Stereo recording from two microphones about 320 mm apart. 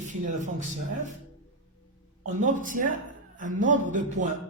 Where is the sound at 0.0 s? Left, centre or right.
Right.